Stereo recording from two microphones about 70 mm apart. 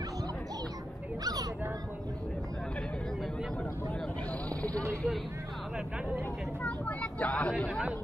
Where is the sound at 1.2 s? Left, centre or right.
Right.